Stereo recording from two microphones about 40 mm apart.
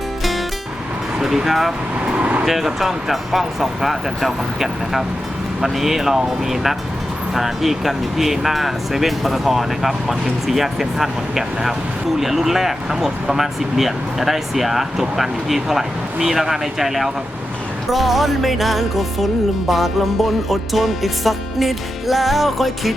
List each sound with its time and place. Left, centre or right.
1.5 s music: centre
2.1 s speech: right
2.5 s music: centre
12.2 s speech: centre
15.1 s music: centre
16.2 s speech: centre
17.9 s music: centre